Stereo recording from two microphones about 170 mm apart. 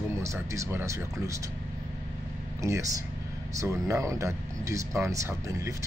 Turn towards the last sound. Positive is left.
turn(degrees=-15)  # may be behind; listen again after turning